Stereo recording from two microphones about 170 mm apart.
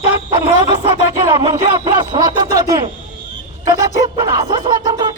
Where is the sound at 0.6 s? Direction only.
30° right (ahead or behind).